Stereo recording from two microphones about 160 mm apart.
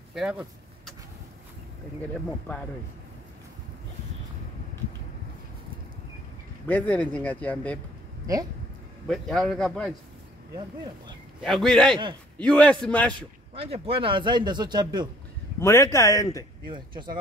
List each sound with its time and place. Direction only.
0.1 s vehicle: 5° right (ahead or behind)
6.7 s speech: 10° left (ahead or behind)
9.0 s a man's voice: centre (ahead or behind)
11.4 s a man's voice: centre (ahead or behind)
13.6 s a man's voice: 35° right (ahead or behind)
15.6 s speech: 15° left (ahead or behind)
16.7 s a man's voice: 30° right (ahead or behind)